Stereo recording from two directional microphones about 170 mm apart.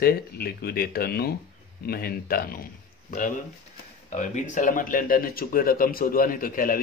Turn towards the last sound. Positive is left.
turn(degrees=55)  # may be behind; listen again after turning